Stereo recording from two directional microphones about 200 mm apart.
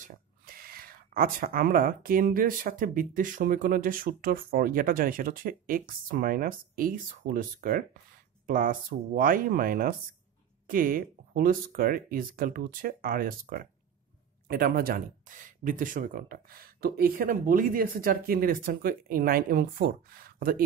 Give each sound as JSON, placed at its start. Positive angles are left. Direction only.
{"t": 0.1, "sound": "speech", "side_deg": -45}